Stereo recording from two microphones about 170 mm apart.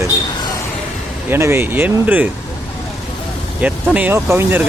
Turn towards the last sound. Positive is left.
turn(degrees=-15)  # may be behind; listen again after turning